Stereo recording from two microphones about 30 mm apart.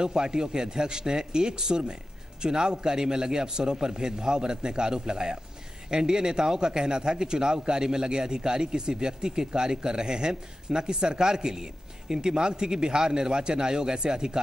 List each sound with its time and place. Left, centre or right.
0.0 s a man's voice: right